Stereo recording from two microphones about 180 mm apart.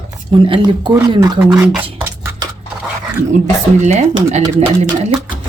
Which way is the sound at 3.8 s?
40° right (ahead or behind).